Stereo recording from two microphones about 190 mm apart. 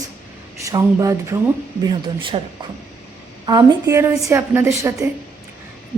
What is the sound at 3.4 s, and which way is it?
A woman's voice, 20° right (ahead or behind).